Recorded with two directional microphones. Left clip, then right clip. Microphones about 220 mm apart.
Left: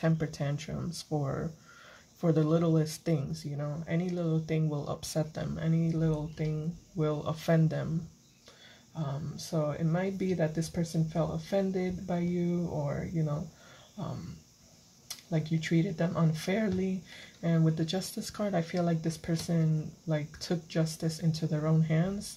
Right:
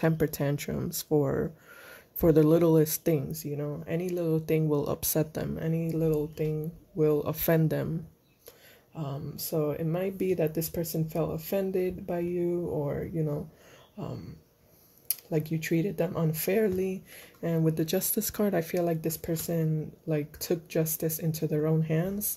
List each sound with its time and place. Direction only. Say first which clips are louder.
0.0 s speech: right 5 dB; 40° right (ahead or behind)
9.8 s speech: right 2 dB; 40° right (ahead or behind)
15.3 s speech: right 3 dB; 40° right (ahead or behind)